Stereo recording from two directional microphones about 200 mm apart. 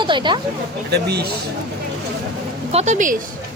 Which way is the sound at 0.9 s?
55° right (ahead or behind).